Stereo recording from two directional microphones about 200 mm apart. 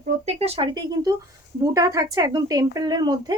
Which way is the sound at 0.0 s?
30° right (ahead or behind).